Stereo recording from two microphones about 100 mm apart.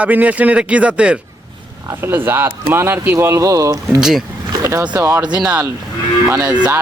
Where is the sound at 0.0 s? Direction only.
15° right (ahead or behind).